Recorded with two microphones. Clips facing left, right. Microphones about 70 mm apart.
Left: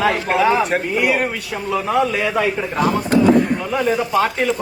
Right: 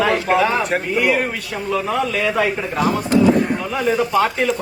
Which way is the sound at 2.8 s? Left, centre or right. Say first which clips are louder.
Left 1 dB; left.